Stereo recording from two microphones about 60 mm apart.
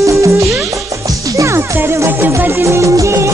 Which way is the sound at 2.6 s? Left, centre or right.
Right.